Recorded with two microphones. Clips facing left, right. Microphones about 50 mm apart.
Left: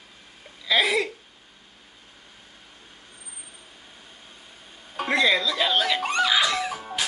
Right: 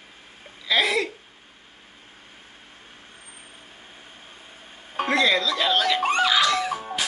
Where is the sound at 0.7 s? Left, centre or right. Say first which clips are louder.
Even; centre.